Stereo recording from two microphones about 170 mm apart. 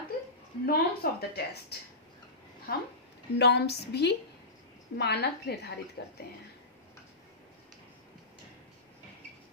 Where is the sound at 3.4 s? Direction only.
75° left (ahead or behind).